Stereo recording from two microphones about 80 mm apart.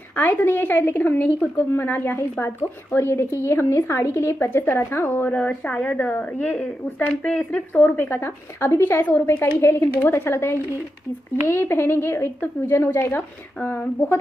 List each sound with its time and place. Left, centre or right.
0.1 s a woman's voice: left
5.3 s a woman's voice: centre